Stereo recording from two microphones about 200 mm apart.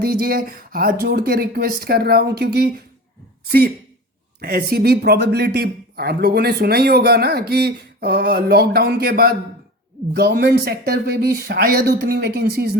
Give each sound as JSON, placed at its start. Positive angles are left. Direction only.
{"t": 0.0, "sound": "speech", "side_deg": -55}
{"t": 4.4, "sound": "speech", "side_deg": -50}